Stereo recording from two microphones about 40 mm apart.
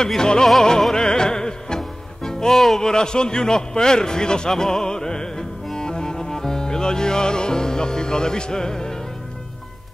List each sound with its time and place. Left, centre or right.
0.0 s music: centre
2.8 s a man's voice: centre